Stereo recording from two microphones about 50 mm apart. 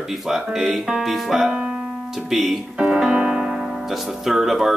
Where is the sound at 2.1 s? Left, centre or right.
Centre.